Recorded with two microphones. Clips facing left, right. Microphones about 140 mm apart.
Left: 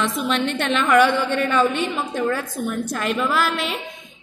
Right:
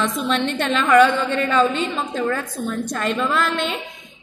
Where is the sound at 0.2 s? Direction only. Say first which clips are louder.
Right 1 dB; 5° left (ahead or behind).